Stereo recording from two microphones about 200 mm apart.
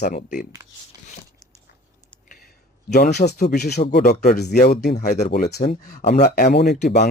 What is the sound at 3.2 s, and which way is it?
Speech, 55° left (ahead or behind).